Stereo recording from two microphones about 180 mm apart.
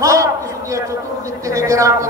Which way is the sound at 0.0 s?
15° right (ahead or behind).